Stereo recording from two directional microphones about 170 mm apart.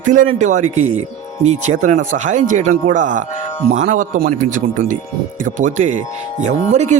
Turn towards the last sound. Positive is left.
turn(degrees=-40)  # may be behind; listen again after turning